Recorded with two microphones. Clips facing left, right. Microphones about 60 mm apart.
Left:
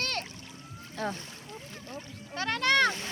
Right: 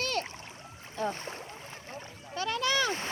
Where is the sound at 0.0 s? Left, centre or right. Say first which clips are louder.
Right 2 dB; left.